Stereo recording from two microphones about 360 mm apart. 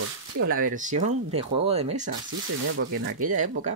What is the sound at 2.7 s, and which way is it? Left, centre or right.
Speech, right.